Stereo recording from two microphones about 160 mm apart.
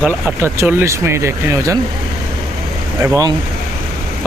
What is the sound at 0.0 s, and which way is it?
Speech, 10° right (ahead or behind).